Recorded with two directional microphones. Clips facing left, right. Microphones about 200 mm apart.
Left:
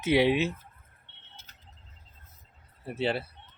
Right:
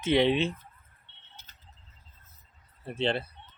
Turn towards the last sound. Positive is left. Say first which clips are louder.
# even
turn(degrees=5)  # may be behind; listen again after turning